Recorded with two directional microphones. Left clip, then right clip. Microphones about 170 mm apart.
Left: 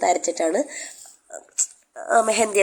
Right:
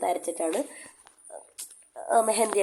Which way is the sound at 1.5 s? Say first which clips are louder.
Left 12 dB; 5° left (ahead or behind).